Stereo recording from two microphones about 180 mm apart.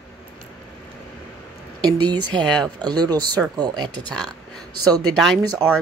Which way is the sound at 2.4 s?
5° left (ahead or behind).